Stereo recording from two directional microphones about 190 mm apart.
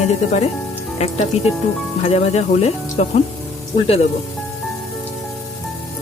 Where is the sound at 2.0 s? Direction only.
35° left (ahead or behind).